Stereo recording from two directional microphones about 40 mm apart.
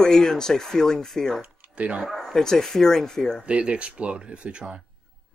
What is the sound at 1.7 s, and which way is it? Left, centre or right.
Speech, right.